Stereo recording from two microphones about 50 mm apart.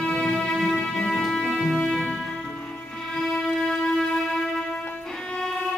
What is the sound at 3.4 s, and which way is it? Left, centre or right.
Music, centre.